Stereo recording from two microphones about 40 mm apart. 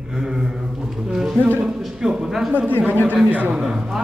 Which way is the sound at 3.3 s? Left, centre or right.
Right.